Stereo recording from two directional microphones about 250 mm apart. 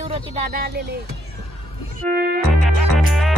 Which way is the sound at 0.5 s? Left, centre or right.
Right.